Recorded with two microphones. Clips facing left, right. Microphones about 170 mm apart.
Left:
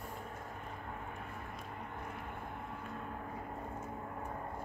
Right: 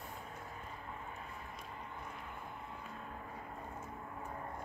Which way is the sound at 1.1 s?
55° left (ahead or behind).